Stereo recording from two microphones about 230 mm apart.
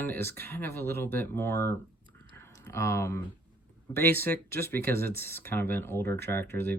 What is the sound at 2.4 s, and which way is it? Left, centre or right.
Typing, centre.